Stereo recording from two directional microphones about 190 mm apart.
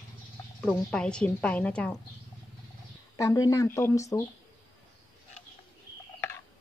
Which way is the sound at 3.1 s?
15° left (ahead or behind).